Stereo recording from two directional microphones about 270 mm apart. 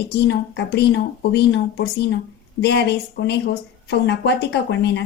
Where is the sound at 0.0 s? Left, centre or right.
Left.